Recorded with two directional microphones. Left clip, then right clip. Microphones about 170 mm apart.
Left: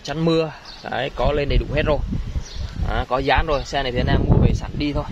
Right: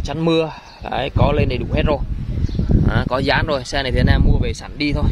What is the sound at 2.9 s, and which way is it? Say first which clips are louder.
Speech: even; 30° right (ahead or behind).